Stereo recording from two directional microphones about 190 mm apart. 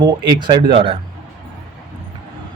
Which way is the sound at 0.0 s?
25° right (ahead or behind).